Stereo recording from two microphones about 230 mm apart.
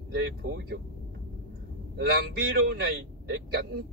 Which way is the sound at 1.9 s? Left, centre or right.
Right.